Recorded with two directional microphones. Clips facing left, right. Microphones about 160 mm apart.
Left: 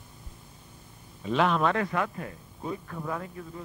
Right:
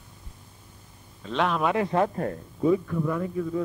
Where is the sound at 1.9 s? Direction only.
35° right (ahead or behind).